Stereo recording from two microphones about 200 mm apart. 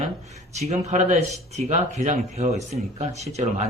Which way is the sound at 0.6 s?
35° right (ahead or behind).